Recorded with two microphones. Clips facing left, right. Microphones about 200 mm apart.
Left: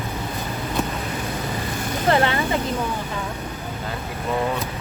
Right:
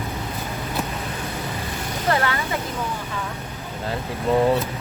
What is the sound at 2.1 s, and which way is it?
Speech, 30° left (ahead or behind).